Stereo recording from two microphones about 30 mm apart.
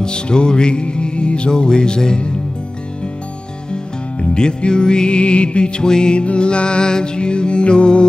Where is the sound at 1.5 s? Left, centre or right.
Left.